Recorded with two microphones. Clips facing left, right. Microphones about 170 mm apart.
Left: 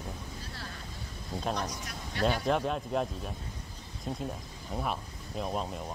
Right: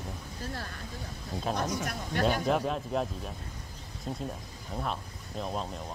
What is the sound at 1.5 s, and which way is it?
Speech, 50° right (ahead or behind).